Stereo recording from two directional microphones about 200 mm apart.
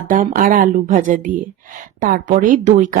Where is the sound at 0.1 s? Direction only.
45° right (ahead or behind).